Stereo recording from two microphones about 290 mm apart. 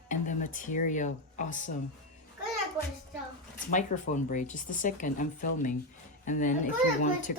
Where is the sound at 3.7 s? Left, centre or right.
Left.